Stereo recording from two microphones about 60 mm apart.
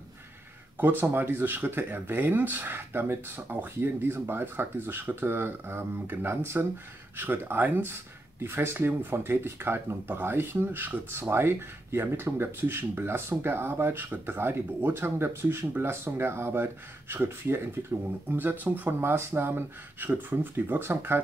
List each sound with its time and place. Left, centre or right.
0.7 s speech: right